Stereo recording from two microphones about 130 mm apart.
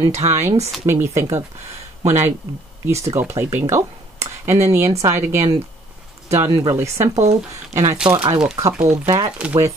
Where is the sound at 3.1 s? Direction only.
20° right (ahead or behind).